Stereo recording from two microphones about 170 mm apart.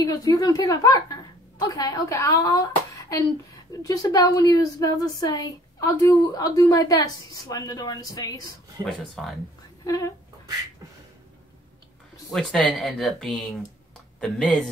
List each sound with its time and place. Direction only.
0.0 s speech: 20° left (ahead or behind)
8.8 s speech: centre (ahead or behind)
9.8 s speech: 20° left (ahead or behind)
12.3 s speech: 5° left (ahead or behind)